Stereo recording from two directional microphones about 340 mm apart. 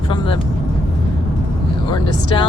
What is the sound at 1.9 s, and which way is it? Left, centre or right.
Speech, centre.